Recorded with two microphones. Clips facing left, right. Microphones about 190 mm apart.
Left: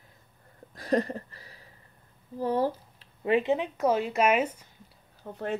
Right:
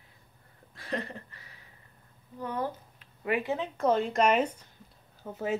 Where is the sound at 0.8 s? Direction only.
40° left (ahead or behind).